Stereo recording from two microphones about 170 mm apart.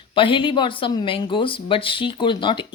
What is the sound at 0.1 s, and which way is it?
Speech, 30° left (ahead or behind).